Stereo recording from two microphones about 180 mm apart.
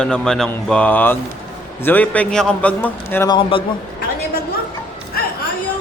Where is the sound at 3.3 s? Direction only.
30° left (ahead or behind).